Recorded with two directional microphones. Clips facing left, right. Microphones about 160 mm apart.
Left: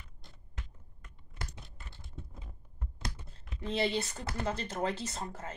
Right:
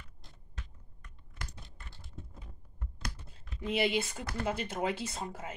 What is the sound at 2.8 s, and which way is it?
Computer keyboard, 25° left (ahead or behind).